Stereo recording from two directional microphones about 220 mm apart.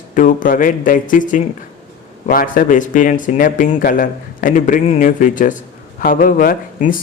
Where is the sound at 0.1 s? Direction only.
35° left (ahead or behind).